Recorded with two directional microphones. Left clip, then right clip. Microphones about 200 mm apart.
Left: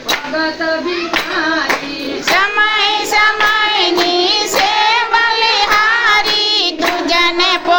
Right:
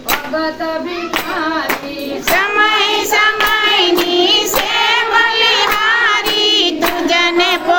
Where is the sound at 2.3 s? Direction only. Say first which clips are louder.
Right 1 dB; 15° right (ahead or behind).